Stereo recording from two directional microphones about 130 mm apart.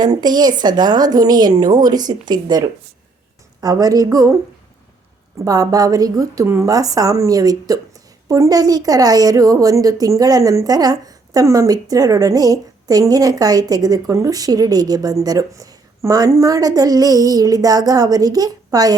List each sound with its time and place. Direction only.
0.0 s a woman's voice: 30° right (ahead or behind)
5.5 s a woman's voice: 25° right (ahead or behind)